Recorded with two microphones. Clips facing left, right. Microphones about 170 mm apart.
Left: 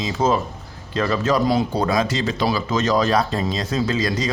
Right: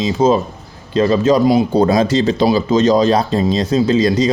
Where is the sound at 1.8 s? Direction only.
30° right (ahead or behind).